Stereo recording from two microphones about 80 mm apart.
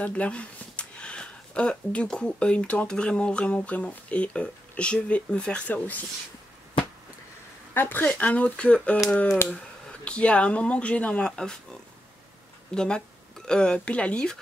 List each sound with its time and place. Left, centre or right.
0.0 s speech: centre
7.7 s speech: left; by 11.5 s centre
12.7 s speech: centre